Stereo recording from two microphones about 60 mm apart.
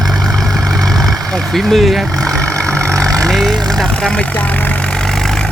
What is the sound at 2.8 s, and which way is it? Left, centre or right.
Vehicle, right.